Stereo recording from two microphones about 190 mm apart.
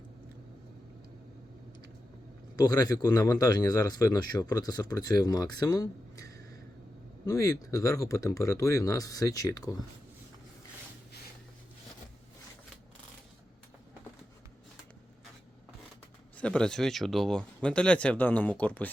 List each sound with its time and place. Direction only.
2.6 s speech: 20° left (ahead or behind)
16.4 s speech: 5° left (ahead or behind)